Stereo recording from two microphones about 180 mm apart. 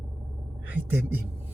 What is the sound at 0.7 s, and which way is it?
Speech, 10° right (ahead or behind).